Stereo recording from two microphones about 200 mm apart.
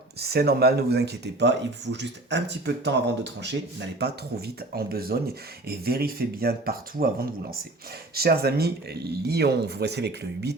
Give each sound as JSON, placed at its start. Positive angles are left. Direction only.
{"t": 0.2, "sound": "speech", "side_deg": -50}